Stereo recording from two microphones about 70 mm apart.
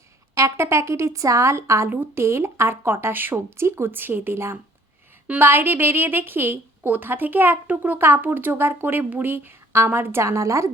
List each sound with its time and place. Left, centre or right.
0.3 s a woman's voice: right
10.2 s speech: right